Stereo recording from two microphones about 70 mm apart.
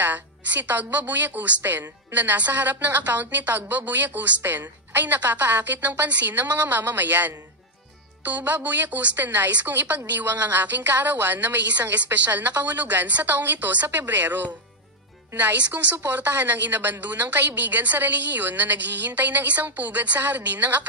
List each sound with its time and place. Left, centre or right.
0.0 s a woman's voice: right